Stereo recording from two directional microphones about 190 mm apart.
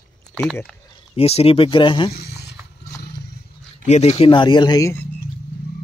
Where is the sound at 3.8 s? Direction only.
35° left (ahead or behind); by 5.0 s 15° left (ahead or behind).